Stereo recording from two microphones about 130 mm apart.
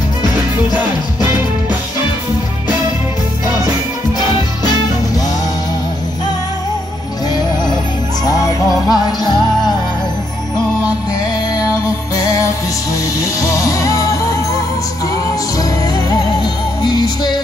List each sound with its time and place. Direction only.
4.2 s music: 35° left (ahead or behind)
7.3 s music: 35° left (ahead or behind)
12.2 s music: 25° left (ahead or behind)
16.8 s music: 30° left (ahead or behind)